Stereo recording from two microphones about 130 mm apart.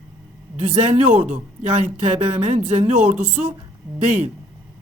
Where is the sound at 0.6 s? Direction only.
70° right (ahead or behind).